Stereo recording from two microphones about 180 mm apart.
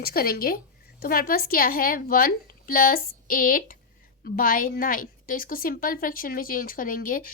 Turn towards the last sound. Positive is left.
turn(degrees=50)  # may be behind; listen again after turning